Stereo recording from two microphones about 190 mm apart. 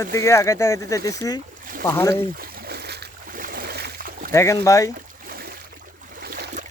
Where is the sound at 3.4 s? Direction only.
50° right (ahead or behind).